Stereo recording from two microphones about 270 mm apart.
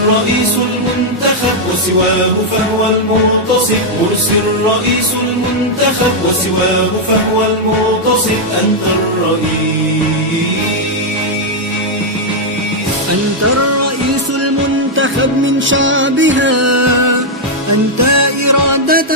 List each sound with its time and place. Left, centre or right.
14.9 s music: right
16.6 s music: right